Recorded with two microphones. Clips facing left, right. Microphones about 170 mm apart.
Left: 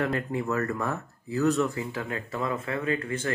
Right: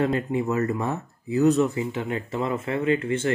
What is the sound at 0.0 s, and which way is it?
Speech, 20° right (ahead or behind).